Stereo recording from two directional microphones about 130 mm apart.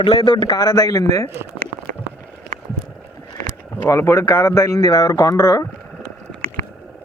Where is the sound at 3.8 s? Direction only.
25° left (ahead or behind).